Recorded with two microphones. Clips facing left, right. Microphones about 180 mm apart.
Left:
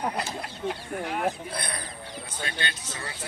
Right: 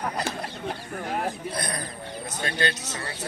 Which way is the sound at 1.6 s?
45° right (ahead or behind).